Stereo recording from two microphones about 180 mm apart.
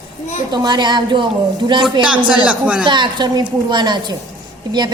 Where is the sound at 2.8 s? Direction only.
25° right (ahead or behind).